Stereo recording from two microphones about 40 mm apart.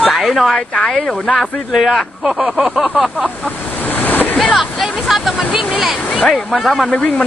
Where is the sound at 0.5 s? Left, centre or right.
Centre.